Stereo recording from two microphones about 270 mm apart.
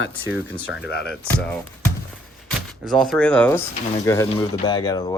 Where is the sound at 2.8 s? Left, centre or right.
Centre.